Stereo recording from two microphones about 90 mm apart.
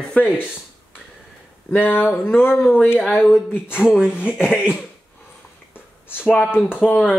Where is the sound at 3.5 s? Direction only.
20° left (ahead or behind).